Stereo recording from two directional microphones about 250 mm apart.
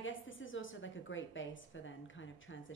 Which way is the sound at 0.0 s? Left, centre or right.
Left.